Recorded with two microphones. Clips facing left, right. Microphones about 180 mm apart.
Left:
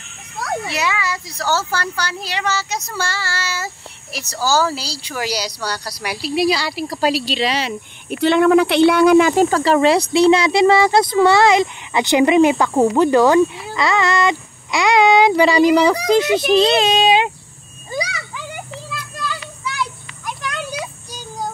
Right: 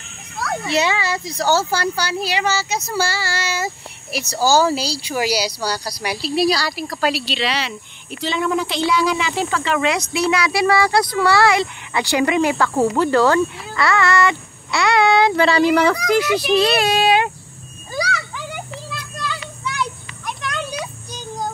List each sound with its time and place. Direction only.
0.7 s speech: 25° right (ahead or behind); by 6.3 s 5° left (ahead or behind)
6.3 s speech: 20° left (ahead or behind)
7.0 s speech: 40° left (ahead or behind); by 17.3 s 20° left (ahead or behind)
18.9 s children playing: 5° left (ahead or behind)